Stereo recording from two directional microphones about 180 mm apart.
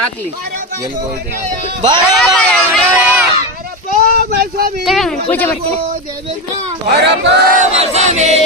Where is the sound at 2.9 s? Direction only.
10° right (ahead or behind).